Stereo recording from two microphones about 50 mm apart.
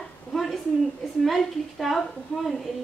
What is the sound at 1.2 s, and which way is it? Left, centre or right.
Speech, centre.